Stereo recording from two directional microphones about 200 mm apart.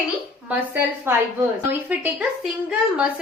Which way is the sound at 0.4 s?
10° right (ahead or behind).